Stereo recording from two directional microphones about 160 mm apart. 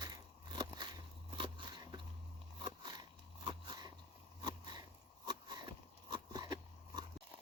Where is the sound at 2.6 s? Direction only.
30° right (ahead or behind).